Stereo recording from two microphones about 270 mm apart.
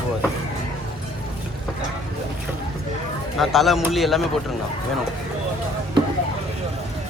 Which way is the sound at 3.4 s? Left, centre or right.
Centre.